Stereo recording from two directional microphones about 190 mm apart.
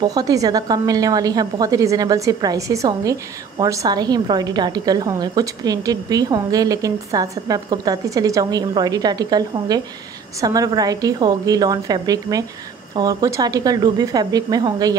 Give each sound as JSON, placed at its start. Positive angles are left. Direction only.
{"t": 0.0, "sound": "a woman's voice", "side_deg": -20}